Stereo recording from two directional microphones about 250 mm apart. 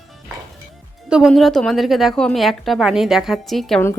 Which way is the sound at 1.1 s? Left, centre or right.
Centre.